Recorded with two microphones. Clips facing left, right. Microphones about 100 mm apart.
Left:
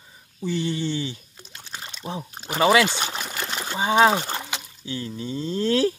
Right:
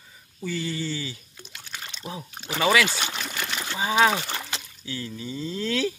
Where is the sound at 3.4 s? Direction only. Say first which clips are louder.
Left 3 dB; 25° left (ahead or behind).